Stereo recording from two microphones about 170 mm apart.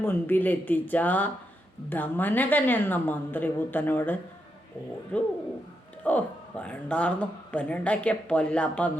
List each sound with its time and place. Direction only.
0.0 s speech: 10° left (ahead or behind)